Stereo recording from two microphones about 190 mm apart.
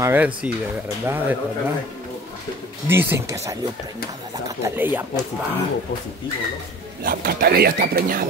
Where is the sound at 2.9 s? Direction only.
10° right (ahead or behind).